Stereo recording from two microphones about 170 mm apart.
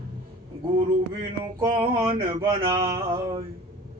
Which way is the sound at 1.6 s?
25° right (ahead or behind).